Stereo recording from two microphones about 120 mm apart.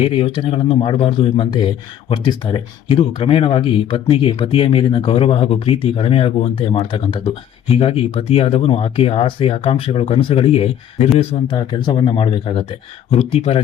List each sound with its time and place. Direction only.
0.0 s speech: 50° left (ahead or behind)
11.5 s speech: 40° left (ahead or behind); by 13.6 s 55° left (ahead or behind)